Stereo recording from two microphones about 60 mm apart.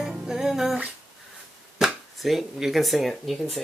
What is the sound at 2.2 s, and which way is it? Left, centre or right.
Speech, centre.